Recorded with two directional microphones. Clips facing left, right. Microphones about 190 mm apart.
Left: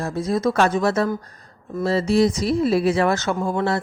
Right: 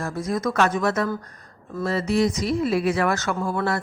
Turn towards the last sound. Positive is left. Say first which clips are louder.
# left 3 dB
turn(degrees=20)  # may be behind; listen again after turning